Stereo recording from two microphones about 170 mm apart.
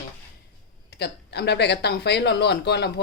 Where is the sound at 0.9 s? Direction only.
75° left (ahead or behind).